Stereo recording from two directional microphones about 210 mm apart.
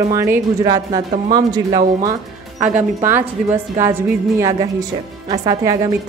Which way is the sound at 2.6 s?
10° right (ahead or behind).